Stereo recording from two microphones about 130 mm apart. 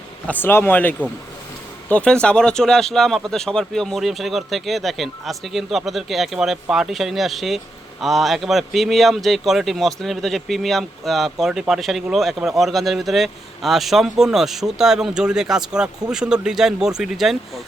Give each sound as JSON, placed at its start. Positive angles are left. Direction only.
{"t": 0.3, "sound": "speech", "side_deg": 15}